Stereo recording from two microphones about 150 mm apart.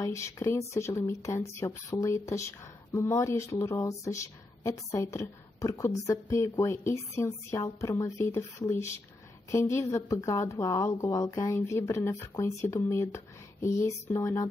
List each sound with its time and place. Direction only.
0.0 s a woman's voice: 20° left (ahead or behind)